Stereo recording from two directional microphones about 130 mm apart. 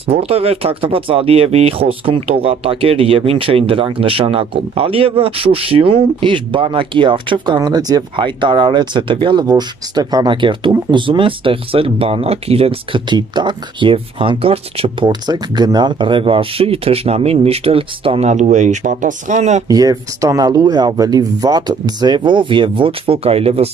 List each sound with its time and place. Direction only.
0.0 s speech: 50° right (ahead or behind)
18.3 s speech: 65° right (ahead or behind)
19.7 s speech: 30° right (ahead or behind); by 23.7 s 50° right (ahead or behind)